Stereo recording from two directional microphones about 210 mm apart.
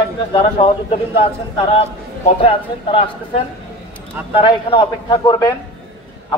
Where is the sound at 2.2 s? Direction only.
25° left (ahead or behind).